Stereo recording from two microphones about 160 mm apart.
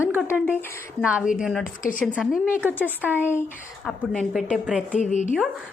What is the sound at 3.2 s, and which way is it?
Speech, 15° left (ahead or behind).